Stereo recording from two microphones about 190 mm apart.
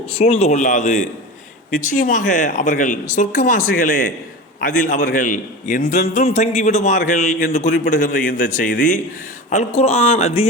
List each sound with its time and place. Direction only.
0.0 s a man's voice: 35° left (ahead or behind)